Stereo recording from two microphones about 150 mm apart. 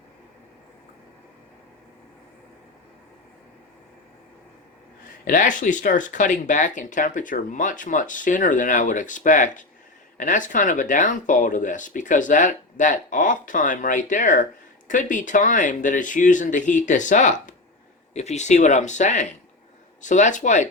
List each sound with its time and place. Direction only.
5.2 s speech: 60° left (ahead or behind)